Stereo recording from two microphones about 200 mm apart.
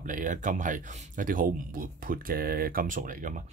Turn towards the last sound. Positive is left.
turn(degrees=-40)  # may be behind; listen again after turning